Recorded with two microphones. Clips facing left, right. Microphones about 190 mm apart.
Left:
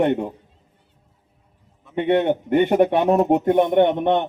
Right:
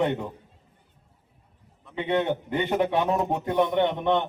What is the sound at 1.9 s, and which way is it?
Speech, 55° left (ahead or behind).